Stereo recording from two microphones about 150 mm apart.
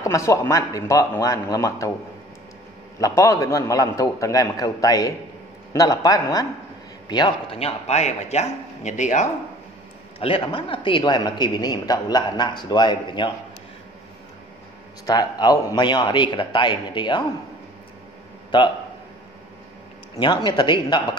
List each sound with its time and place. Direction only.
0.0 s a man's voice: 20° left (ahead or behind)
3.0 s a man's voice: 20° left (ahead or behind); by 9.3 s 55° left (ahead or behind)
10.1 s a man's voice: 40° left (ahead or behind)
15.0 s a man's voice: 25° left (ahead or behind)
20.2 s speech: 30° left (ahead or behind)